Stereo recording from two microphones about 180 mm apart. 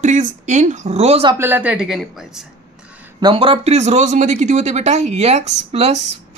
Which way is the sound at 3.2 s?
30° right (ahead or behind).